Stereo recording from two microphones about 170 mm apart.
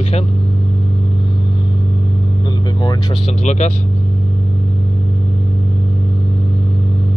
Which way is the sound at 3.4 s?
45° left (ahead or behind).